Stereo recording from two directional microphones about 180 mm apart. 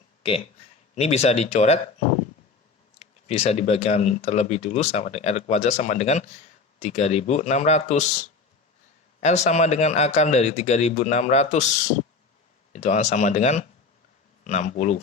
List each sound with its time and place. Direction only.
0.2 s speech: 30° left (ahead or behind)
3.0 s speech: 35° left (ahead or behind)
9.2 s speech: 40° left (ahead or behind)
12.7 s speech: 40° left (ahead or behind)